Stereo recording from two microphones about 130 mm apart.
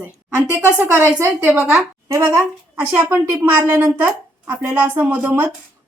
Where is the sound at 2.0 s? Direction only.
20° right (ahead or behind).